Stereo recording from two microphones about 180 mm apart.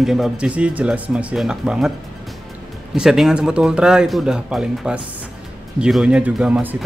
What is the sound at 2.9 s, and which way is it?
Speech, 5° right (ahead or behind).